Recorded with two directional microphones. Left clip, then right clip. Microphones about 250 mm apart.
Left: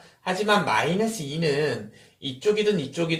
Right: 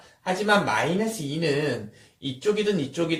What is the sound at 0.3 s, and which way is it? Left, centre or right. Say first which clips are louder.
Speech: even; centre.